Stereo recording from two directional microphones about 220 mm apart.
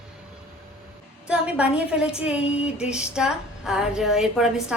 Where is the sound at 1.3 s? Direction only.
5° right (ahead or behind).